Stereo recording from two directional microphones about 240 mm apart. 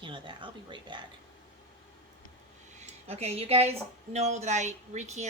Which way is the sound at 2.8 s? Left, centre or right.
Right.